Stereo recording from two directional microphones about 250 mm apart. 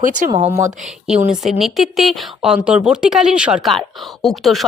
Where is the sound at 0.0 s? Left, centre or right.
Right.